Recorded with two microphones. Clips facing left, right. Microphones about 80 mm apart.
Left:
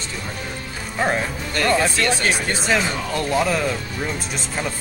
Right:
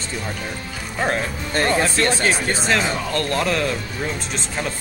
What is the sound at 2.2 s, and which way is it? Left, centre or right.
Speech, centre.